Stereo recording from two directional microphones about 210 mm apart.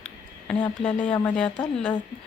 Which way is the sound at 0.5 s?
25° left (ahead or behind).